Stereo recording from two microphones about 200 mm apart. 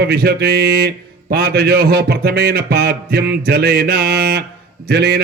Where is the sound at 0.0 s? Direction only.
50° right (ahead or behind).